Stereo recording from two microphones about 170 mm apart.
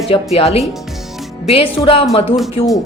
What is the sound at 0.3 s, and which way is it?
Speech, 35° left (ahead or behind).